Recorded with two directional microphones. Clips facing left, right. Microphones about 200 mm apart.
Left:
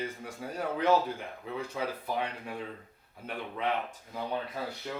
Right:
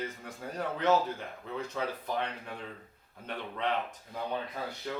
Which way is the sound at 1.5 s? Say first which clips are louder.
Even; 10° left (ahead or behind).